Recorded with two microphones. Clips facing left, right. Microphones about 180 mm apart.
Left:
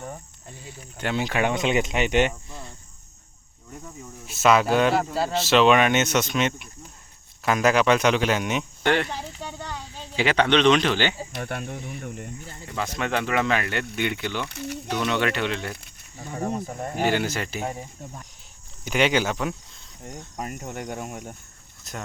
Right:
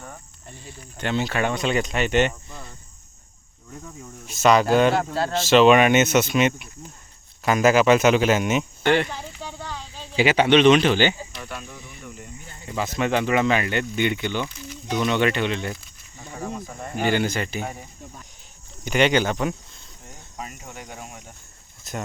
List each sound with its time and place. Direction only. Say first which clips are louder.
0.6 s speech: right 1 dB; 10° left (ahead or behind)
4.3 s speech: right 2 dB; centre (ahead or behind)
9.4 s a sound: even; 10° left (ahead or behind)
10.2 s speech: right 3 dB; 5° right (ahead or behind)
11.3 s speech: left 5 dB; 55° left (ahead or behind)
12.6 s speech: right 4 dB; 5° right (ahead or behind)
14.5 s speech: left 6 dB; 65° left (ahead or behind)
15.0 s speech: right 3 dB; centre (ahead or behind)
17.0 s speech: right 2 dB; centre (ahead or behind)
18.9 s speech: right 2 dB; 5° left (ahead or behind)
20.4 s speech: left 5 dB; 45° left (ahead or behind)
21.9 s speech: right 4 dB; centre (ahead or behind)